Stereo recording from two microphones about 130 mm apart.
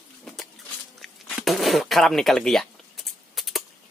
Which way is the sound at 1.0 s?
Centre (ahead or behind).